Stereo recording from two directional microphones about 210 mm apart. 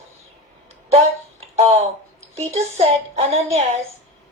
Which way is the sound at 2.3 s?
30° right (ahead or behind).